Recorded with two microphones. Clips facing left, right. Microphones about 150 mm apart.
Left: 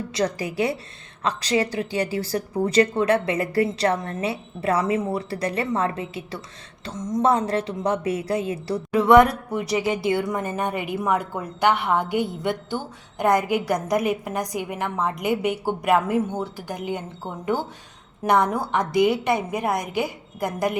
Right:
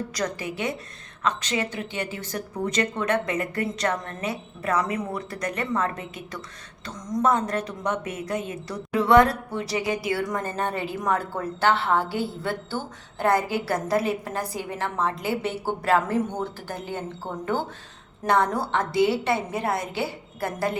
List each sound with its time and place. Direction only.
0.1 s a woman's voice: 30° left (ahead or behind)